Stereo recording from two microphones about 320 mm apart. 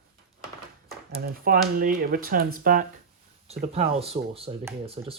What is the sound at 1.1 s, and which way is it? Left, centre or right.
Speech, right.